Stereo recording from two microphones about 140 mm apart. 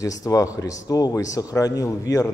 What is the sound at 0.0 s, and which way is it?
A man's voice, 25° left (ahead or behind).